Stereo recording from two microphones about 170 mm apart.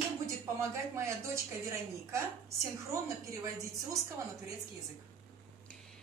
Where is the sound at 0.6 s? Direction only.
15° right (ahead or behind).